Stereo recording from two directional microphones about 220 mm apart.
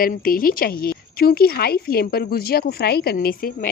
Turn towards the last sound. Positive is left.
turn(degrees=40)  # may be behind; listen again after turning